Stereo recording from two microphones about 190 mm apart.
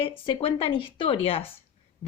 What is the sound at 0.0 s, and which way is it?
A woman's voice, 30° left (ahead or behind).